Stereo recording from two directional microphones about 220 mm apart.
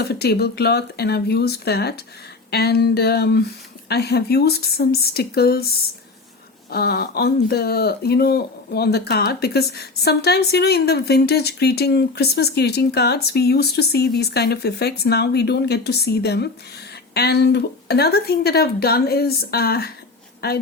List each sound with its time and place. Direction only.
0.0 s speech: 45° left (ahead or behind)